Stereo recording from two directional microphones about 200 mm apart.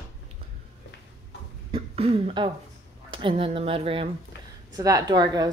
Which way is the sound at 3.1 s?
25° right (ahead or behind).